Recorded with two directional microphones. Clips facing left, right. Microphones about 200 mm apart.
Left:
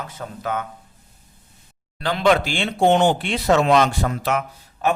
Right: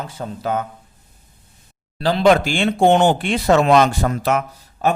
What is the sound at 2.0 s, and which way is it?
Speech, 35° right (ahead or behind).